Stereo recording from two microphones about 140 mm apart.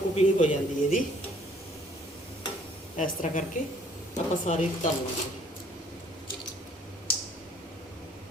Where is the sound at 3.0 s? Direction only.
70° left (ahead or behind).